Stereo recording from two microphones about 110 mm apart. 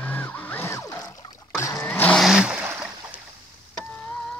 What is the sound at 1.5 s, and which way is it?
Vehicle, 30° left (ahead or behind).